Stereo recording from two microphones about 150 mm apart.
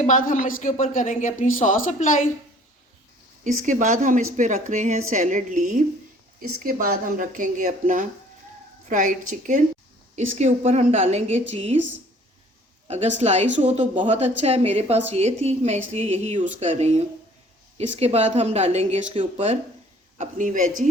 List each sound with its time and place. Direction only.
0.0 s a woman's voice: 60° left (ahead or behind)
3.4 s speech: 55° right (ahead or behind)
10.2 s speech: 50° right (ahead or behind)
12.9 s speech: 50° right (ahead or behind)
20.1 s speech: 55° right (ahead or behind)